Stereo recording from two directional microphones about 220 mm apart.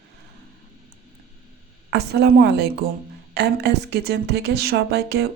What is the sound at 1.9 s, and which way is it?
A woman's voice, 50° right (ahead or behind).